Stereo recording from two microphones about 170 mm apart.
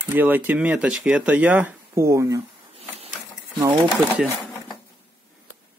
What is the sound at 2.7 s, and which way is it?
Printer, 35° right (ahead or behind).